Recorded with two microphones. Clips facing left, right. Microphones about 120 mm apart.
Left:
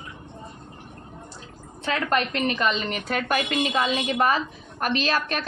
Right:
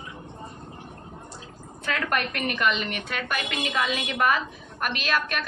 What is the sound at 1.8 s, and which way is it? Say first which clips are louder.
A woman's voice: left 3 dB; 25° left (ahead or behind).